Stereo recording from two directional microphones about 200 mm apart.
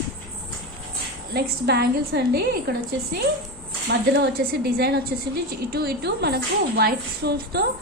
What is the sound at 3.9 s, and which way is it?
A woman's voice, 60° right (ahead or behind).